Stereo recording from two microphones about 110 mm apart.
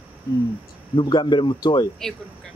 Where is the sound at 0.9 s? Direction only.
45° left (ahead or behind).